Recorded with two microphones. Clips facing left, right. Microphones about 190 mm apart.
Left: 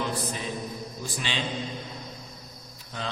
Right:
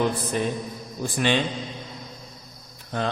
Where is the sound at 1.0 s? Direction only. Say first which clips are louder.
Right 13 dB; 55° right (ahead or behind).